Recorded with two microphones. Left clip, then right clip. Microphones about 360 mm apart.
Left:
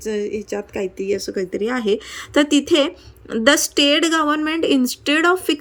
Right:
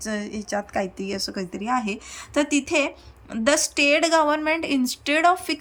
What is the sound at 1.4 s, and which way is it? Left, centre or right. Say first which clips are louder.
Speech: left 4 dB; right.